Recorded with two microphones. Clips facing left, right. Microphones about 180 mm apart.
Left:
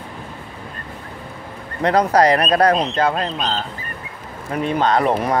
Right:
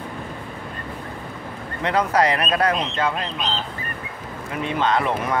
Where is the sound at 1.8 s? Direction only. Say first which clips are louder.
Left 5 dB; 40° left (ahead or behind).